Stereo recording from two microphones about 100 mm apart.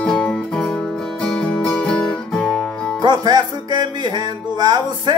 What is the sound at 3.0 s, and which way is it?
Music, 45° right (ahead or behind).